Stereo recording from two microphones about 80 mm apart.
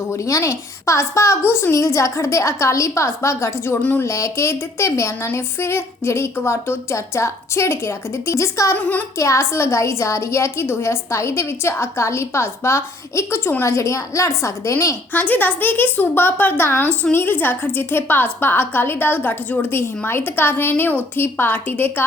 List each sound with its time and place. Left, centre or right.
0.1 s a woman's voice: left
8.7 s a woman's voice: left
9.1 s a woman's voice: left
15.1 s a woman's voice: left